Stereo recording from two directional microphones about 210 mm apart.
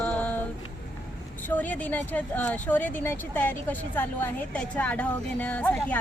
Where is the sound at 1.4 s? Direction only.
10° left (ahead or behind).